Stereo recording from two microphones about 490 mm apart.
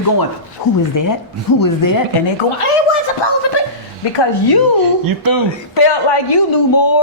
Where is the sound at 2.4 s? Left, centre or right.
Left.